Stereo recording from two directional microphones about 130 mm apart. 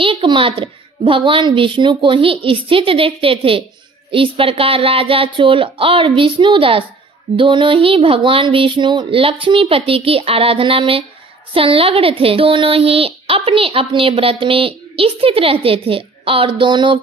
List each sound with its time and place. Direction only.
0.0 s a child's voice: 40° right (ahead or behind)